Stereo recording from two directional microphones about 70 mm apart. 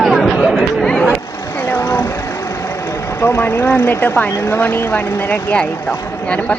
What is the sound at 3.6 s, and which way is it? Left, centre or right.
Speech, left.